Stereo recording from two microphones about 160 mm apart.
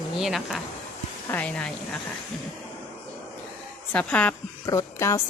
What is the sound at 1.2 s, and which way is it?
Speech, 10° left (ahead or behind).